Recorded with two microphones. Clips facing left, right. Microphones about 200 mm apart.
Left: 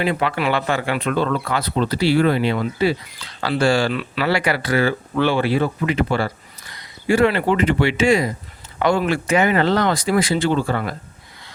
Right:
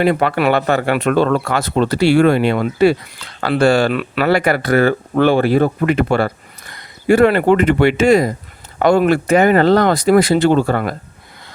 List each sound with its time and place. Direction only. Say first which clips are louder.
0.0 s speech: right 6 dB; 55° right (ahead or behind)
10.7 s speech: right 5 dB; 50° right (ahead or behind)